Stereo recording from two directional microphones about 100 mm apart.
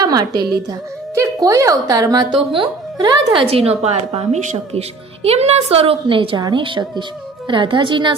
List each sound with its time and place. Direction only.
0.0 s a woman's voice: 40° right (ahead or behind)
1.1 s a woman's voice: 30° right (ahead or behind)
2.3 s speech: 60° right (ahead or behind)
3.3 s speech: 75° right (ahead or behind)
6.3 s a woman's voice: 45° right (ahead or behind)
6.6 s a woman's voice: 55° right (ahead or behind)